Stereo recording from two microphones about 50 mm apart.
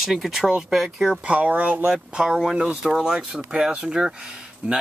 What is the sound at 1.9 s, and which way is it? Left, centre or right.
Speech, centre.